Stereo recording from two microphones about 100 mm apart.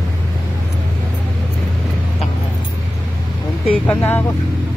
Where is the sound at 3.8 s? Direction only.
15° left (ahead or behind).